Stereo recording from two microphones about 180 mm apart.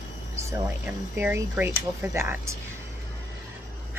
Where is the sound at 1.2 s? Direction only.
10° right (ahead or behind).